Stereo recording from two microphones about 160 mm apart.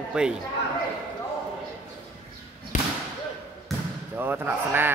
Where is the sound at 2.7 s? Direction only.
50° left (ahead or behind).